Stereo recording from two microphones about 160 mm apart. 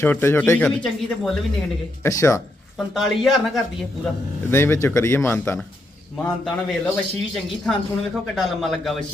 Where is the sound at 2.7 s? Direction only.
Centre (ahead or behind).